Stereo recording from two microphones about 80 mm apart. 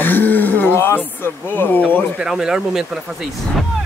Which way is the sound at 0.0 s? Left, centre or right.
Left.